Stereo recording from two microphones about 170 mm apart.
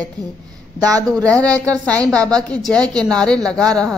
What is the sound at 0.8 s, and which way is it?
Speech, 20° right (ahead or behind).